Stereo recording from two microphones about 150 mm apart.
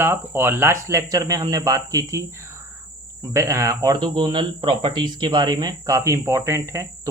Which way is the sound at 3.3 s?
20° right (ahead or behind).